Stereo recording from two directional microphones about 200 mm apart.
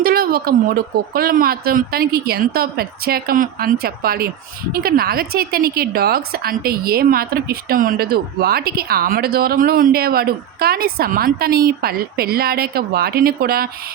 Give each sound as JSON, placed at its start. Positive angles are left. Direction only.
{"t": 0.0, "sound": "speech", "side_deg": -50}